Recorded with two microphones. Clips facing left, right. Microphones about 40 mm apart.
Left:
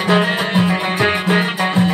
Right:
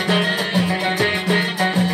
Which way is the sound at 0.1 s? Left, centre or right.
Left.